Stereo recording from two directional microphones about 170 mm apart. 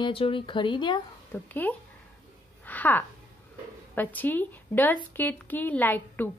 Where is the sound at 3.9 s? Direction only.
10° left (ahead or behind).